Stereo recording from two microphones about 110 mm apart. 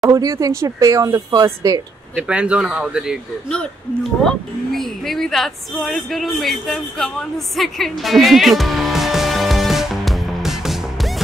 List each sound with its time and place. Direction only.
0.1 s speech: 30° right (ahead or behind)
2.1 s speech: 10° right (ahead or behind)
4.2 s speech: 5° left (ahead or behind)